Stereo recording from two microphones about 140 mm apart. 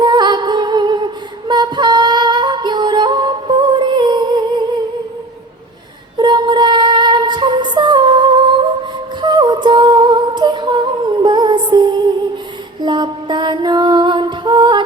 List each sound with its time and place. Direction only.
0.0 s music: 30° right (ahead or behind)
1.5 s female singing: 30° right (ahead or behind)
6.1 s female singing: 35° right (ahead or behind)
11.2 s music: 30° right (ahead or behind)